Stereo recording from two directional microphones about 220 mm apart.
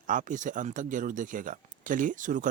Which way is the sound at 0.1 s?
35° right (ahead or behind).